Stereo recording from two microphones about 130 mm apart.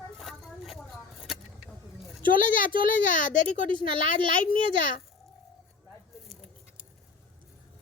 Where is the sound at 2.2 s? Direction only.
90° left.